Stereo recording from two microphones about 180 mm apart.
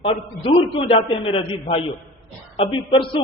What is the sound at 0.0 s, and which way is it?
A woman's voice, 30° left (ahead or behind).